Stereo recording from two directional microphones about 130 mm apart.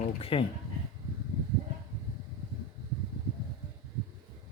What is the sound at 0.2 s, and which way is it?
Speech, 45° left (ahead or behind).